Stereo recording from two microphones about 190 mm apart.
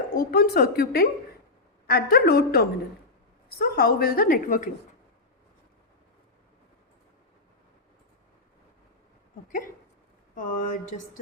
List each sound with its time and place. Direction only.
0.1 s a woman's voice: 50° left (ahead or behind)
10.3 s a woman's voice: 45° left (ahead or behind)